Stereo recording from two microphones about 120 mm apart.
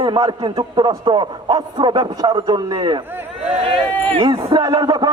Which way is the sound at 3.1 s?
15° right (ahead or behind).